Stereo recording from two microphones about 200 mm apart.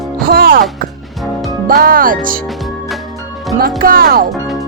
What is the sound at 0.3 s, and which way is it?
Music, 50° right (ahead or behind).